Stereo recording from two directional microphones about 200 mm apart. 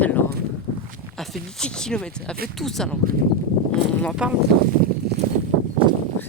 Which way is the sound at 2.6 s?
Centre (ahead or behind).